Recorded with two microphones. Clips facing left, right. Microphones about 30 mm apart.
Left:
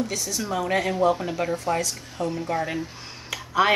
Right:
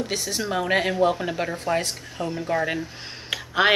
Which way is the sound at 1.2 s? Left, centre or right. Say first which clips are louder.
Even; right.